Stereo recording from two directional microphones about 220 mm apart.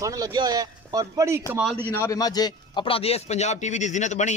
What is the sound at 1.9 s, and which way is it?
A man's voice, 15° left (ahead or behind).